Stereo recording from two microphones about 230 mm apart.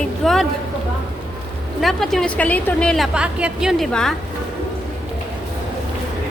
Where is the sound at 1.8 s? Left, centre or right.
Centre.